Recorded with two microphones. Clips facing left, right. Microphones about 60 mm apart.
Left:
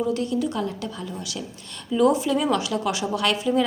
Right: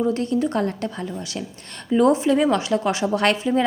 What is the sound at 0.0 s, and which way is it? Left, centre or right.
A woman's voice, right.